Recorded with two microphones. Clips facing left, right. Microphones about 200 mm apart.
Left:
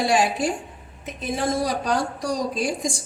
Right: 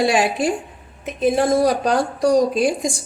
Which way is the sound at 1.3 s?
60° right (ahead or behind).